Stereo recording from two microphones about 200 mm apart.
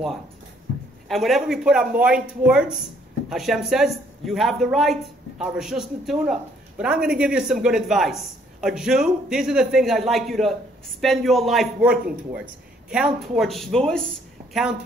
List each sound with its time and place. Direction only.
1.0 s a man's voice: centre (ahead or behind)